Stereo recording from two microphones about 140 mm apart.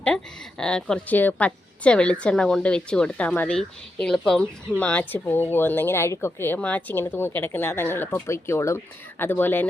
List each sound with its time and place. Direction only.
0.6 s speech: 5° left (ahead or behind)